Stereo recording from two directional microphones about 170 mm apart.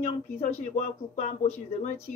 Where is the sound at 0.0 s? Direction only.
40° left (ahead or behind).